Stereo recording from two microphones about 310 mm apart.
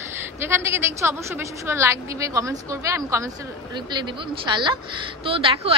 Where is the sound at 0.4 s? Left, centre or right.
Centre.